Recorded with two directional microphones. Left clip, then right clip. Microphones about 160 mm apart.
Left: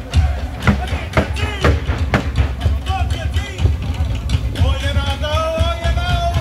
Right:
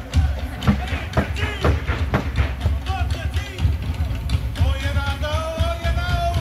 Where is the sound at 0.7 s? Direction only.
5° left (ahead or behind).